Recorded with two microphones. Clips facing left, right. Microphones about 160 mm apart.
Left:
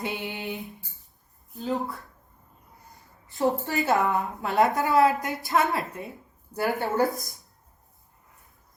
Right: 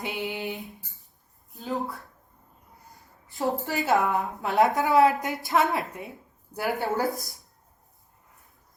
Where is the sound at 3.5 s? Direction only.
Centre (ahead or behind).